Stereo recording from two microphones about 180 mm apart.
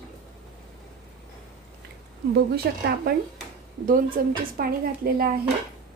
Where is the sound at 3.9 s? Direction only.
50° right (ahead or behind).